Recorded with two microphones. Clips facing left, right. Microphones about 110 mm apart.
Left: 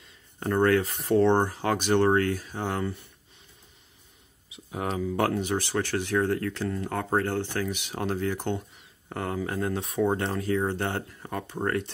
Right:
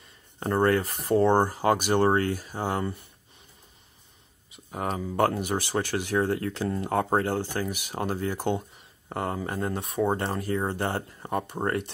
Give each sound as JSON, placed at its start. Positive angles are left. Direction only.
{"t": 0.4, "sound": "speech", "side_deg": -5}
{"t": 4.6, "sound": "speech", "side_deg": 0}
{"t": 11.1, "sound": "speech", "side_deg": -20}